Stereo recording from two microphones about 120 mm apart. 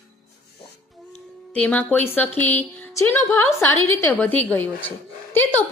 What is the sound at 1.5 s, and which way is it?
A woman's voice, 10° left (ahead or behind).